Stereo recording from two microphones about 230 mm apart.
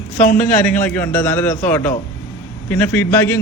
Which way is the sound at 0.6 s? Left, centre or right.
Centre.